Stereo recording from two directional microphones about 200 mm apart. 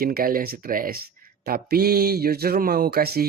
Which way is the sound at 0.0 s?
45° right (ahead or behind).